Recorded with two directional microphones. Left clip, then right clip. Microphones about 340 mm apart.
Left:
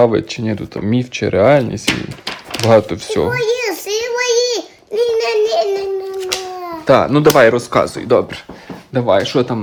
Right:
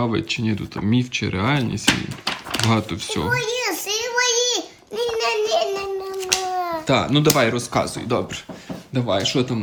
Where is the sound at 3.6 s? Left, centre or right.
Centre.